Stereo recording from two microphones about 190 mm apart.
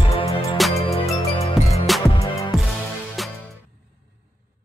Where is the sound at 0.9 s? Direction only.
35° left (ahead or behind).